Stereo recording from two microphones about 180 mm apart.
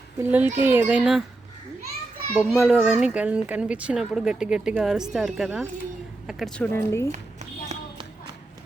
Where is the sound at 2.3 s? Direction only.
Centre (ahead or behind).